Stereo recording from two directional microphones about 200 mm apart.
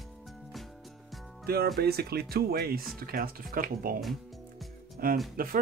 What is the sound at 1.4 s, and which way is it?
Speech, 50° right (ahead or behind).